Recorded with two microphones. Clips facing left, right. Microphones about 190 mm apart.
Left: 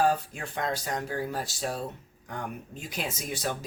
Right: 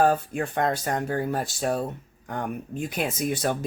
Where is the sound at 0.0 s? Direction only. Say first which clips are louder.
Right 4 dB; 55° right (ahead or behind).